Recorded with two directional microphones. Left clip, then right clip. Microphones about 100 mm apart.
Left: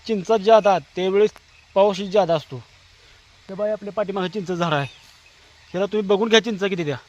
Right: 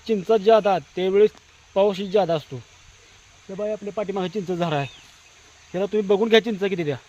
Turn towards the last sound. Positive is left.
turn(degrees=15)  # may be behind; listen again after turning